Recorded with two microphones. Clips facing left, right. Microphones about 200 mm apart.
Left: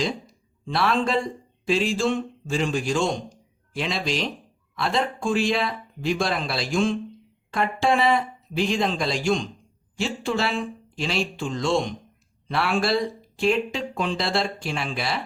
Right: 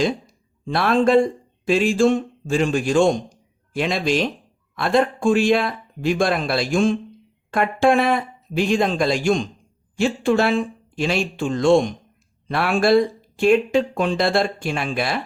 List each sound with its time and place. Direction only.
0.6 s a man's voice: 50° right (ahead or behind)